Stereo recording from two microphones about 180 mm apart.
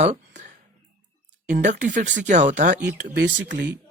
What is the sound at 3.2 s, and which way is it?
Speech, 80° right.